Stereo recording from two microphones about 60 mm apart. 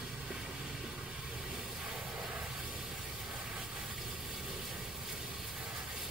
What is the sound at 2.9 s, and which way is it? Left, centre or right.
Vehicle, centre.